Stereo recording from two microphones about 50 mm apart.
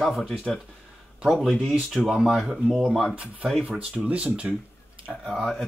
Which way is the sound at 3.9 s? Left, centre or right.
Right.